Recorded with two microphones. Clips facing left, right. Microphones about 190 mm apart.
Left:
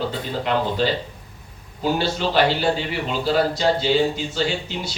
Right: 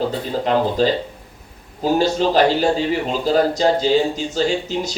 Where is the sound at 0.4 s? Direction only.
40° right (ahead or behind).